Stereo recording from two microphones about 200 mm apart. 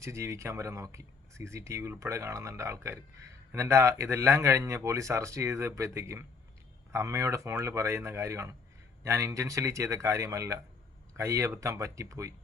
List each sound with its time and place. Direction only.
0.0 s speech: 15° right (ahead or behind)